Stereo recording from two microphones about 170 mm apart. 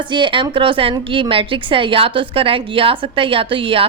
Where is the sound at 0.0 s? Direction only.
30° right (ahead or behind).